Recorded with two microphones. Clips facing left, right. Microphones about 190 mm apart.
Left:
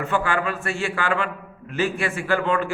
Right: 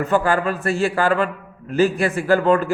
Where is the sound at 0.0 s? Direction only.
40° right (ahead or behind).